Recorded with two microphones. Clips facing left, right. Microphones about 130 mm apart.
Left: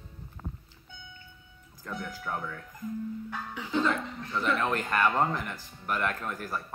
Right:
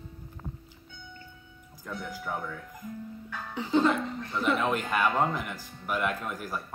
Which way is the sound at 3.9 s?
10° right (ahead or behind).